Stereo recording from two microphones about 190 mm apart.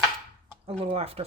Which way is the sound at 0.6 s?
30° right (ahead or behind).